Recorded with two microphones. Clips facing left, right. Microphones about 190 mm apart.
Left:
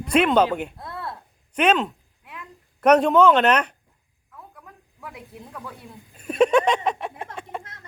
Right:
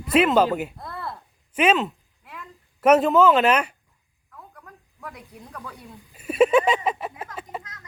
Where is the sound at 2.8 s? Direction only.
5° right (ahead or behind).